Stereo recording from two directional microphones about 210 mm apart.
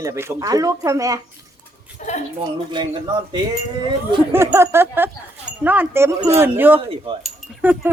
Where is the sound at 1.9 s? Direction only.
35° left (ahead or behind).